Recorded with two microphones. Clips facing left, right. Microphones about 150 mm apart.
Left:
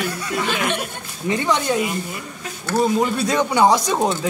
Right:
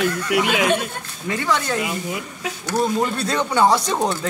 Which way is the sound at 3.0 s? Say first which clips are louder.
Left 2 dB; 15° left (ahead or behind).